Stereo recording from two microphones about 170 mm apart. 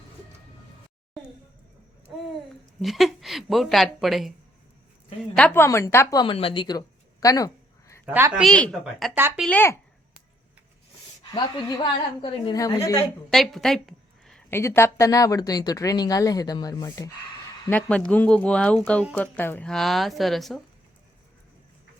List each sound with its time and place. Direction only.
2.8 s a woman's voice: centre (ahead or behind)
5.4 s speech: 15° left (ahead or behind)
6.3 s a sound: 30° left (ahead or behind)
8.0 s a woman's voice: 10° right (ahead or behind)
9.1 s speech: 10° right (ahead or behind)
9.4 s speech: 10° left (ahead or behind)
11.2 s speech: 25° left (ahead or behind)
13.3 s a sound: centre (ahead or behind)
14.5 s speech: 15° left (ahead or behind)
17.7 s a woman's voice: 10° left (ahead or behind)